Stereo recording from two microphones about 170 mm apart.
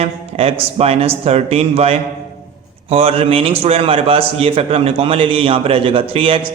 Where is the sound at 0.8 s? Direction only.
35° right (ahead or behind).